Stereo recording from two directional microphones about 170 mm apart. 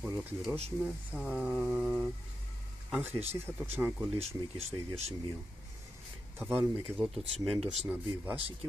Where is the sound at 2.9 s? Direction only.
10° right (ahead or behind).